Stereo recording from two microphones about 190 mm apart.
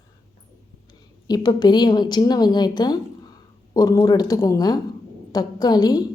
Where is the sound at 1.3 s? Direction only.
20° left (ahead or behind).